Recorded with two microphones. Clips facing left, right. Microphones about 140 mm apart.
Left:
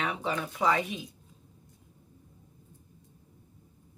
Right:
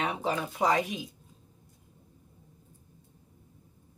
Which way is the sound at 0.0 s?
35° right (ahead or behind).